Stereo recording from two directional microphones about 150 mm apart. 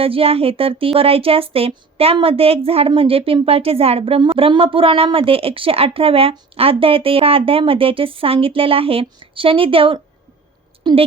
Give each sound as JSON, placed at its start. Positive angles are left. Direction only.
{"t": 0.0, "sound": "speech", "side_deg": -40}